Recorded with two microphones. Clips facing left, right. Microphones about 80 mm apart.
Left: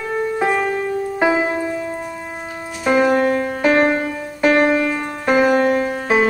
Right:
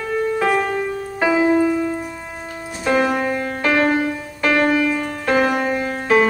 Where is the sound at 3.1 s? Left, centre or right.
Centre.